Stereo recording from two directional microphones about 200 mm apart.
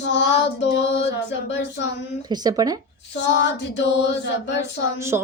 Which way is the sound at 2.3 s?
20° right (ahead or behind).